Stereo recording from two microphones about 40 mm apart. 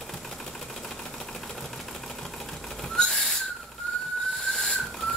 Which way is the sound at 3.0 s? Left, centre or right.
Centre.